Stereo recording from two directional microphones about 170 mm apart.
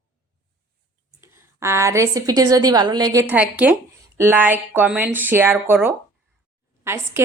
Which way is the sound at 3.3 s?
10° right (ahead or behind).